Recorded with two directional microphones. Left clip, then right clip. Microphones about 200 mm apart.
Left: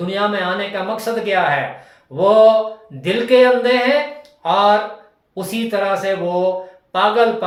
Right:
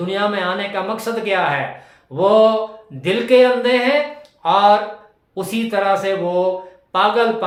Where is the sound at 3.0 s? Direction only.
20° right (ahead or behind).